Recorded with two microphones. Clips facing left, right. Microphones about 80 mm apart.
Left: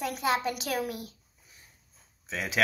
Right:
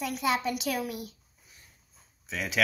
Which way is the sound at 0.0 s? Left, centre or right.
Left.